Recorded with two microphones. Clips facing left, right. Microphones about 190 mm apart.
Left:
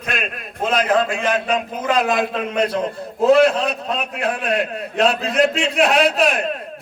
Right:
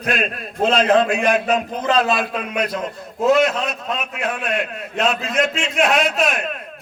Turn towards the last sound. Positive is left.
turn(degrees=35)  # may be behind; listen again after turning